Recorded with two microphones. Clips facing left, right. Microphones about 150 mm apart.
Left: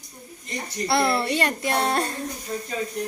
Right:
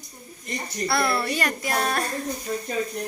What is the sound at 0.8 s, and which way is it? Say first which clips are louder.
Speech: left 2 dB; 25° left (ahead or behind).